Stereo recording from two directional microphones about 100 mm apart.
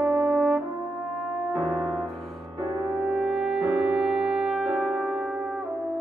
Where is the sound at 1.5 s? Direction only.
15° right (ahead or behind).